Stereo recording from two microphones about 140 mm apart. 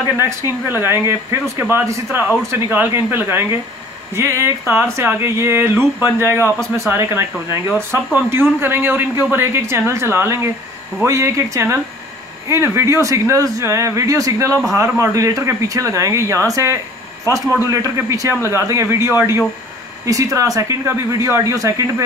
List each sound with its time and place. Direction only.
0.2 s speech: 15° right (ahead or behind)
17.3 s speech: 20° left (ahead or behind)
17.6 s speech: 20° right (ahead or behind)